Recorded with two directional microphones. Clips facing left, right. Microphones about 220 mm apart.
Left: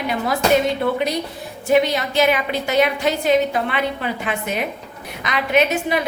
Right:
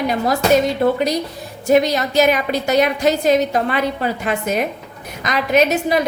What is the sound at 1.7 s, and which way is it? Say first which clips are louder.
A woman's voice: right 2 dB; 40° right (ahead or behind).